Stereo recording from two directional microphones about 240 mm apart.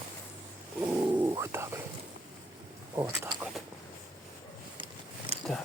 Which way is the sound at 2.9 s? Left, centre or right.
Centre.